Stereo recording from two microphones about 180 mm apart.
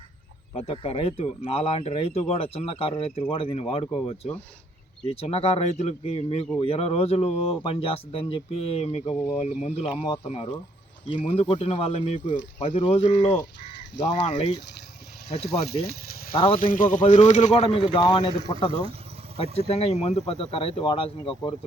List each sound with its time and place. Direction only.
0.5 s speech: 35° left (ahead or behind)
14.0 s speech: 75° left (ahead or behind)
15.4 s speech: 60° left (ahead or behind)
16.3 s speech: 30° left (ahead or behind)
16.7 s speech: 50° left (ahead or behind); by 21.5 s 30° left (ahead or behind)